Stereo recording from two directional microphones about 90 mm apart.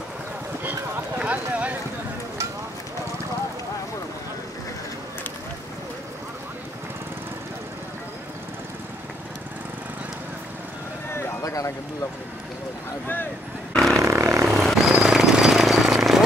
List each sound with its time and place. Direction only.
0.7 s clip-clop: 20° right (ahead or behind)
11.1 s a sound: 30° left (ahead or behind)
13.0 s speech: 20° left (ahead or behind)
13.9 s roar: 35° right (ahead or behind)
14.5 s vehicle: centre (ahead or behind)